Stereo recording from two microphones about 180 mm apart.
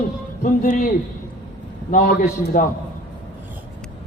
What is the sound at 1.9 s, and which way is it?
Speech, 45° left (ahead or behind).